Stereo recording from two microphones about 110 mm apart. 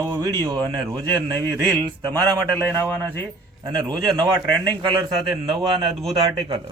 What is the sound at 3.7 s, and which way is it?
Speech, 40° right (ahead or behind).